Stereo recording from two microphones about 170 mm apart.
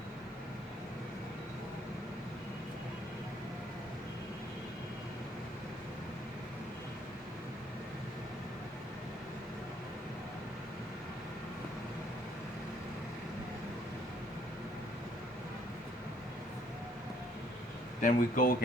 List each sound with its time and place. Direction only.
18.0 s speech: 55° left (ahead or behind)